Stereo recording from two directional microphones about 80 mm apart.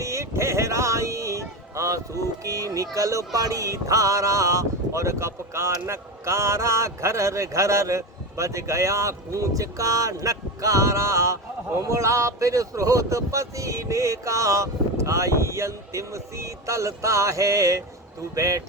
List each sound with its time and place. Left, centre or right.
0.0 s speech: right